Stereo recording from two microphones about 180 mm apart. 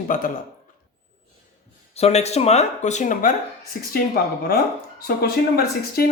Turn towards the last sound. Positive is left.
turn(degrees=60)  # may be behind; listen again after turning